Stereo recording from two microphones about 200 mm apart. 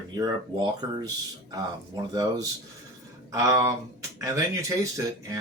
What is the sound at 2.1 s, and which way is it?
Speech, 15° right (ahead or behind).